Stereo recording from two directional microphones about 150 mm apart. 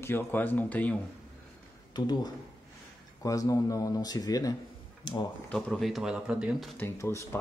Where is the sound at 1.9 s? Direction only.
30° left (ahead or behind).